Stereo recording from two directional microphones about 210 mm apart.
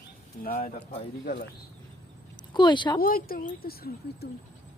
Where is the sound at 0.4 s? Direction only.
45° left (ahead or behind).